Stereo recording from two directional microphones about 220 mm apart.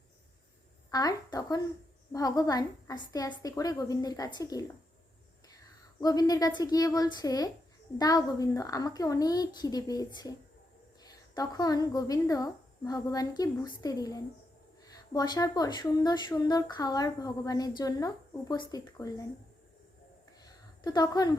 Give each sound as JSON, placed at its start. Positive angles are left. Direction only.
{"t": 0.9, "sound": "speech", "side_deg": 15}
{"t": 6.0, "sound": "speech", "side_deg": 15}
{"t": 20.4, "sound": "a sound", "side_deg": 20}